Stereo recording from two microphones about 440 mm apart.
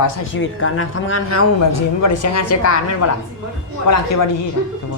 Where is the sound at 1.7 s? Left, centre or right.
Left.